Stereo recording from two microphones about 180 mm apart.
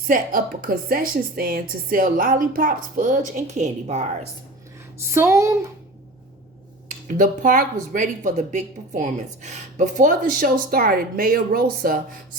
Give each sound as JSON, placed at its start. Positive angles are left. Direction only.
{"t": 0.1, "sound": "speech", "side_deg": -50}
{"t": 5.1, "sound": "a child's voice", "side_deg": -15}
{"t": 6.8, "sound": "speech", "side_deg": -45}